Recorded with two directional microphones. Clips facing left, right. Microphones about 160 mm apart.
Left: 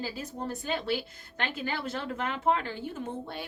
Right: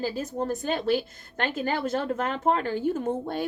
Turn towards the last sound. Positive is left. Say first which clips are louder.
# right 9 dB
turn(degrees=-45)  # may be behind; listen again after turning